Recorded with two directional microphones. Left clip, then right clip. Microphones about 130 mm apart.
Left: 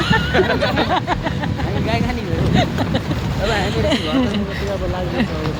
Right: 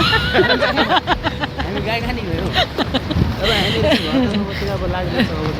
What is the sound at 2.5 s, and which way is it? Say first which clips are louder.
Speech: right 3 dB; 35° right (ahead or behind).